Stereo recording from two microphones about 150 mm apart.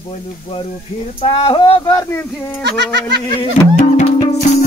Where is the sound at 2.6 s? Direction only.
90° right.